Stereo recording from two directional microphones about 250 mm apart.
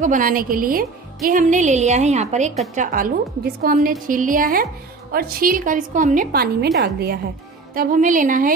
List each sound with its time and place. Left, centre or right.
0.0 s a woman's voice: right